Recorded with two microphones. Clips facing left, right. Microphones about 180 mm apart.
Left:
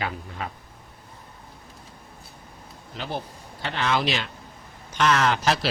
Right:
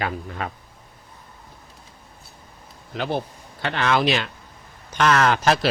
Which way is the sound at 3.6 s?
60° right (ahead or behind).